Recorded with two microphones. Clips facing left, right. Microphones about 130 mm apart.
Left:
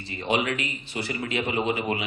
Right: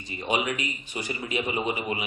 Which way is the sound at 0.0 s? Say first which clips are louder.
Left 2 dB; 15° right (ahead or behind).